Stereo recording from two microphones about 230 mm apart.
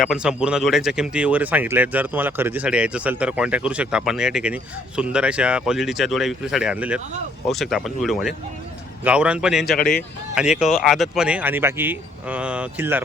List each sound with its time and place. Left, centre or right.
0.0 s speech: centre
9.7 s speech: left
10.3 s speech: centre